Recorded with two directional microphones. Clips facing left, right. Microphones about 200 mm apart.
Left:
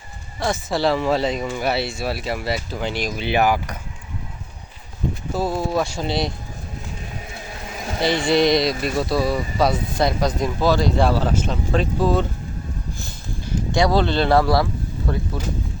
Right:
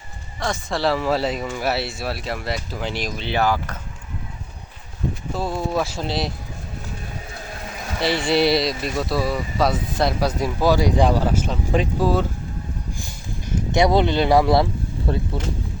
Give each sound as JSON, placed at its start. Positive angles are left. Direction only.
{"t": 0.3, "sound": "speech", "side_deg": 5}
{"t": 3.2, "sound": "speech", "side_deg": 15}
{"t": 5.3, "sound": "speech", "side_deg": 5}
{"t": 8.0, "sound": "speech", "side_deg": -5}
{"t": 13.0, "sound": "a sound", "side_deg": -15}